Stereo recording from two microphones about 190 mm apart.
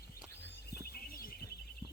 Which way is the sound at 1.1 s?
50° left (ahead or behind).